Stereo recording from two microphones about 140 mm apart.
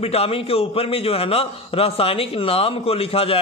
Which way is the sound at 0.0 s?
45° left (ahead or behind).